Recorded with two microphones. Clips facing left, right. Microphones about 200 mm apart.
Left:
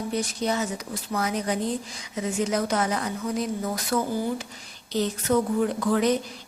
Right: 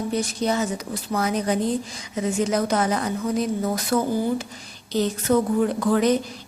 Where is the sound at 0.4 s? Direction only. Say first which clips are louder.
Right 4 dB; 40° right (ahead or behind).